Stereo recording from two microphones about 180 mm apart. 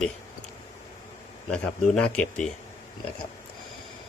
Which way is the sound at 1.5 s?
5° left (ahead or behind).